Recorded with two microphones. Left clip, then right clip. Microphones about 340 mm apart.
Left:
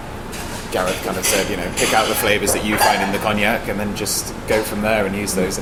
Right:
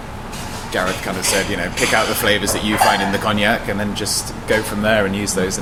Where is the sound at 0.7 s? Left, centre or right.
Right.